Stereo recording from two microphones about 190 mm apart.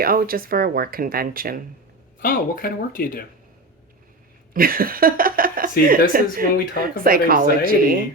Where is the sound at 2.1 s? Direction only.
45° left (ahead or behind).